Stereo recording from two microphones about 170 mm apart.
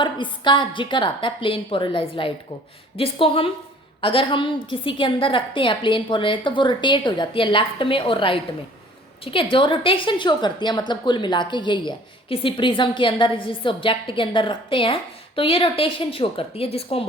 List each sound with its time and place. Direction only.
0.0 s a woman's voice: 30° left (ahead or behind)